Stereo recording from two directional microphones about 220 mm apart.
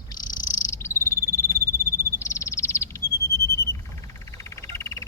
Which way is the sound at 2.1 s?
10° left (ahead or behind).